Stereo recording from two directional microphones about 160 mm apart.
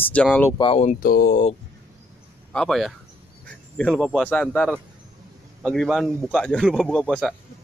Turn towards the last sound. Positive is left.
turn(degrees=5)  # may be behind; listen again after turning